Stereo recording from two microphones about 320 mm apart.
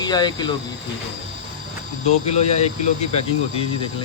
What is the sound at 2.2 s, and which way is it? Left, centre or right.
Speech, centre.